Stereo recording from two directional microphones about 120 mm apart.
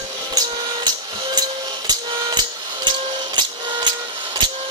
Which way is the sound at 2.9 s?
40° right (ahead or behind).